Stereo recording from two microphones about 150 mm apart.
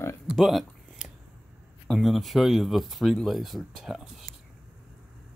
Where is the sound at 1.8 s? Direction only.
Centre (ahead or behind).